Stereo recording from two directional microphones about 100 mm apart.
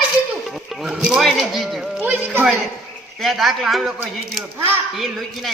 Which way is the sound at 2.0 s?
15° right (ahead or behind).